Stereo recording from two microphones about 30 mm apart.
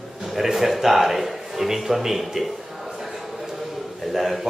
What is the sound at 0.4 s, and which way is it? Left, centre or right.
A man's voice, centre.